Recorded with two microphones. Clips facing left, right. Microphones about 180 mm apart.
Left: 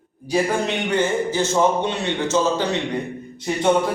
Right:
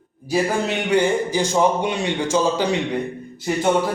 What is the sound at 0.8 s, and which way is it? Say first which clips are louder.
A man's voice: right 4 dB; 15° right (ahead or behind).